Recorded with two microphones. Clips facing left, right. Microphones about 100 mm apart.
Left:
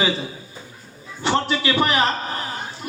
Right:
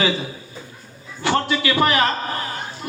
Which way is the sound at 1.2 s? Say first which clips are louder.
Right 1 dB; 25° left (ahead or behind).